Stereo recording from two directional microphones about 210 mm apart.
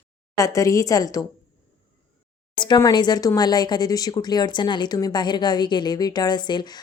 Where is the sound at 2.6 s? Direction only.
20° left (ahead or behind).